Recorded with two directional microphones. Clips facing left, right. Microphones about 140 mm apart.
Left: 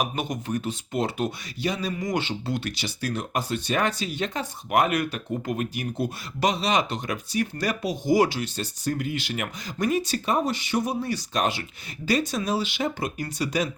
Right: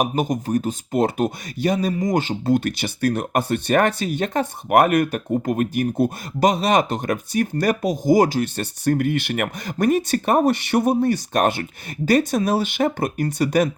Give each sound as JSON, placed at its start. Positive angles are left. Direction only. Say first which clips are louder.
{"t": 0.0, "sound": "speech", "louder": "right 7 dB", "side_deg": -40}